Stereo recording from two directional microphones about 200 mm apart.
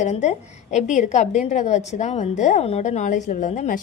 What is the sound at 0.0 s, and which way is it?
A woman's voice, 35° left (ahead or behind).